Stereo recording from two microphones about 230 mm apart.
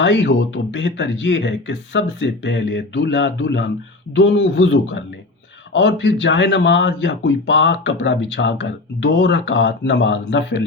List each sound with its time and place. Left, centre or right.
0.0 s speech: left